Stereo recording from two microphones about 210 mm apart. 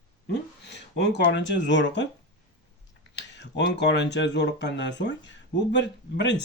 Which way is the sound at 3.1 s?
55° left (ahead or behind).